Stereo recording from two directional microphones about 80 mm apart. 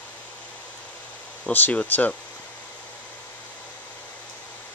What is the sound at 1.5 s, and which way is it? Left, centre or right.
Speech, left.